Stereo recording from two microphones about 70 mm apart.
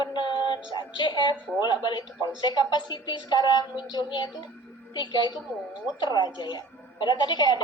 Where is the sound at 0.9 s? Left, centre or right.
Left.